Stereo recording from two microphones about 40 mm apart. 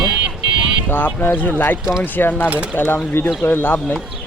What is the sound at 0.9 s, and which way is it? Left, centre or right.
Speech, left.